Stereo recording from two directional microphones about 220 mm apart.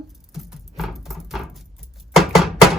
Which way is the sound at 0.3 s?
Centre (ahead or behind).